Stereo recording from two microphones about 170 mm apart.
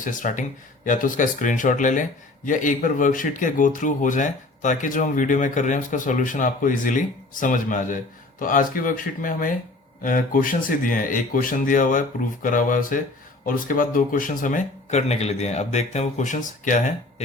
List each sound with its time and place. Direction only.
0.0 s speech: 50° left (ahead or behind)